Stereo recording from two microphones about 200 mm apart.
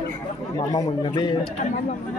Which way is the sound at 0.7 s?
20° left (ahead or behind).